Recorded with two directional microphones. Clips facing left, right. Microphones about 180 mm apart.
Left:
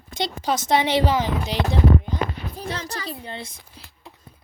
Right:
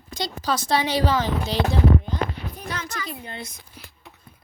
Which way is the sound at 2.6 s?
30° left (ahead or behind).